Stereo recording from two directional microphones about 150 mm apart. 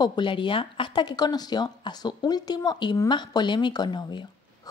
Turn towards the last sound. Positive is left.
turn(degrees=30)  # may be behind; listen again after turning